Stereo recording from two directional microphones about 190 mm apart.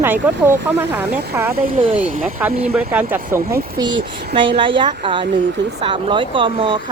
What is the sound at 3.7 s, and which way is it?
Speech, 25° right (ahead or behind).